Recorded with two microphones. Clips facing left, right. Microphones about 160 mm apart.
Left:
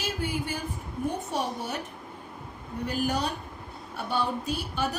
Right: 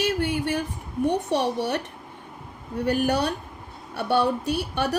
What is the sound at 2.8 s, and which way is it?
Speech, 70° right (ahead or behind).